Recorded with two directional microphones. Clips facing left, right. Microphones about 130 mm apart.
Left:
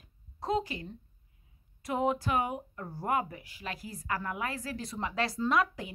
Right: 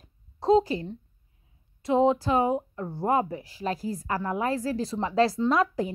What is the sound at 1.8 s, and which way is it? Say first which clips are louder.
A woman's voice: right 8 dB; 25° right (ahead or behind).